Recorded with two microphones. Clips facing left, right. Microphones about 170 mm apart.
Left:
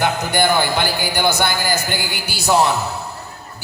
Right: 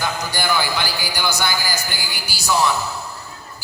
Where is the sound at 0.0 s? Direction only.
60° left (ahead or behind).